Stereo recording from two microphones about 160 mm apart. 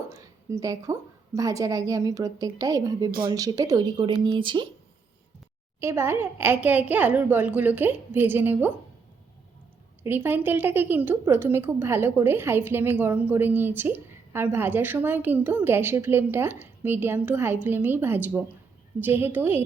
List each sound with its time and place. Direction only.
0.5 s a woman's voice: 20° right (ahead or behind)
5.8 s a woman's voice: 15° right (ahead or behind)
10.0 s a woman's voice: 10° right (ahead or behind)